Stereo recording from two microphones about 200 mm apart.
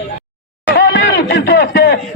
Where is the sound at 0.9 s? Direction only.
60° left (ahead or behind).